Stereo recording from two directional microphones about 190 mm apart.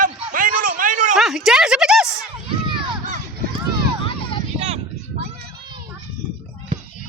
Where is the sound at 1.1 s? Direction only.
Centre (ahead or behind).